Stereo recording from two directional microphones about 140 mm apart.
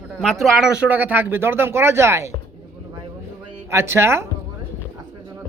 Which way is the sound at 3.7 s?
20° right (ahead or behind).